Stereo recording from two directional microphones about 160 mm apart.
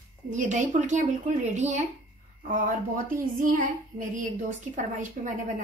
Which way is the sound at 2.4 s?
55° right (ahead or behind).